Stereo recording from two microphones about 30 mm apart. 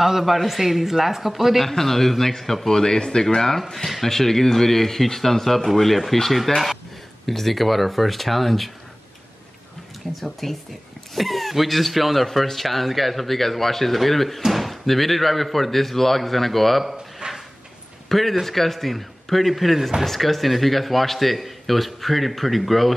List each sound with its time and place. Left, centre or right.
0.0 s a man's voice: centre
1.6 s speech: centre
2.7 s speech: left
3.3 s a man's voice: centre
10.1 s a man's voice: centre
17.2 s a sound: right
18.0 s a man's voice: centre